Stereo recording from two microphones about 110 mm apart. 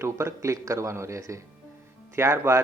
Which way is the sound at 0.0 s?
25° right (ahead or behind).